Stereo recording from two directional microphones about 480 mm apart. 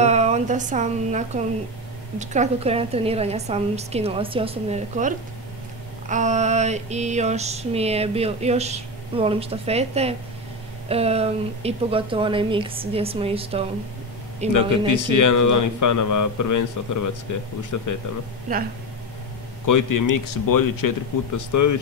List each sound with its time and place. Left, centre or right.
0.0 s speech: centre
2.1 s mantra: centre
14.9 s a man's voice: left
18.5 s mantra: centre
19.6 s a man's voice: left